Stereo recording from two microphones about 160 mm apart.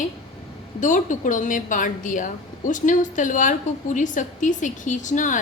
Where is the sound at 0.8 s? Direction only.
55° left (ahead or behind).